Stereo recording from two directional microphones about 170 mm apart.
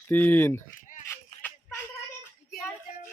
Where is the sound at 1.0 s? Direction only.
15° left (ahead or behind).